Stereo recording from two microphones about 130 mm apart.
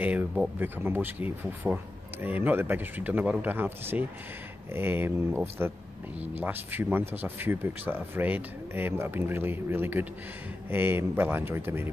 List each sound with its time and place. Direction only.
0.0 s speech: 10° right (ahead or behind)